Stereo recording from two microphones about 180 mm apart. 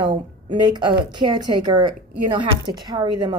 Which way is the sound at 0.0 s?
25° right (ahead or behind).